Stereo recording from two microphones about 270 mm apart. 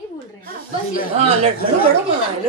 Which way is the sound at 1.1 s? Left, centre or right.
Right.